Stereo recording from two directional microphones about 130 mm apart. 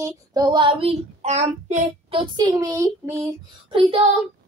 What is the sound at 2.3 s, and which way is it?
Child singing, 30° right (ahead or behind).